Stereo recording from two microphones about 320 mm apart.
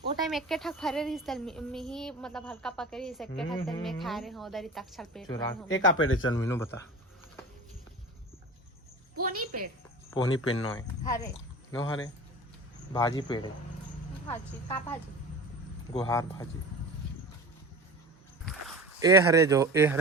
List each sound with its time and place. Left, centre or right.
0.3 s a child's voice: centre
5.6 s a man's voice: left
6.5 s speech: centre
9.2 s a woman's voice: right
10.2 s a man's voice: left
10.8 s speech: centre
18.9 s speech: centre